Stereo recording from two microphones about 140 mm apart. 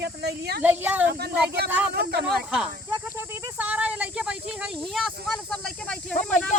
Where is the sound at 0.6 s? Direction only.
15° right (ahead or behind).